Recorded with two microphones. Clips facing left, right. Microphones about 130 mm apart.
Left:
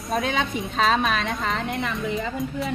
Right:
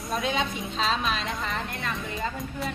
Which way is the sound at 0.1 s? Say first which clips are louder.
Left 3 dB; 55° left (ahead or behind).